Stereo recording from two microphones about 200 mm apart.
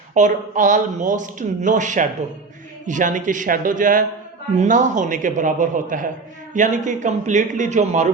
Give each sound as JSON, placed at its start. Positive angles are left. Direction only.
{"t": 0.1, "sound": "speech", "side_deg": -40}